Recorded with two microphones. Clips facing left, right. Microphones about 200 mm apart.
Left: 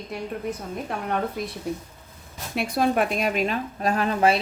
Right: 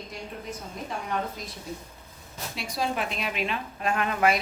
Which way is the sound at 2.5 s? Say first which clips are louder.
Left 8 dB; 55° left (ahead or behind).